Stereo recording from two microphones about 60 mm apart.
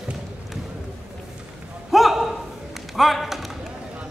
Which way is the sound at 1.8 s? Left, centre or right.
Centre.